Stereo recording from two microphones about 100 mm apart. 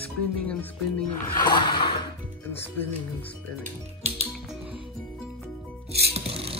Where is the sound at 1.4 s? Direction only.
50° left (ahead or behind).